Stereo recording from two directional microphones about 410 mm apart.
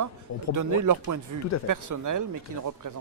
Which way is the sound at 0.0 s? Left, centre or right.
Right.